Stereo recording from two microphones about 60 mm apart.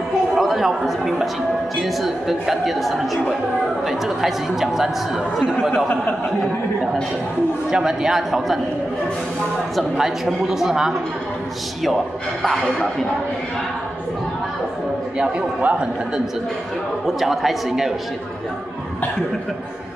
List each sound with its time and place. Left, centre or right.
0.4 s speech: centre
7.7 s speech: centre
9.9 s speech: centre
15.1 s speech: centre
17.0 s speech: centre